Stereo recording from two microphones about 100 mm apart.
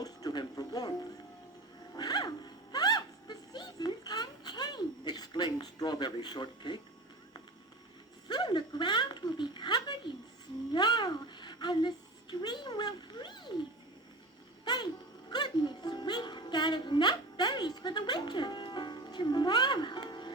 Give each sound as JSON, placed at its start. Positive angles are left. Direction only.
{"t": 0.0, "sound": "music", "side_deg": 40}
{"t": 8.3, "sound": "a woman's voice", "side_deg": 50}
{"t": 14.6, "sound": "a sound", "side_deg": 45}
{"t": 15.3, "sound": "music", "side_deg": 45}